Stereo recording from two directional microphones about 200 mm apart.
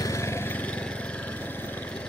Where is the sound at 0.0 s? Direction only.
15° left (ahead or behind).